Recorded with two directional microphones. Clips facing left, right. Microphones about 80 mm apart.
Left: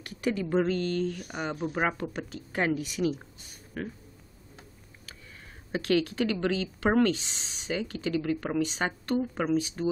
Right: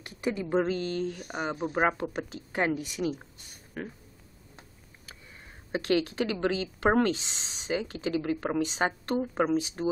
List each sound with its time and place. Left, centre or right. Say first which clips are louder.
0.0 s speech: left 1 dB; centre
3.0 s speech: left 3 dB; centre
3.8 s speech: left 2 dB; centre
5.7 s speech: even; right